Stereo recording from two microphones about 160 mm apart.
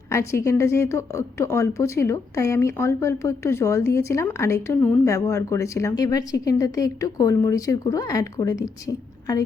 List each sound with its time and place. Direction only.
0.1 s a woman's voice: 15° left (ahead or behind)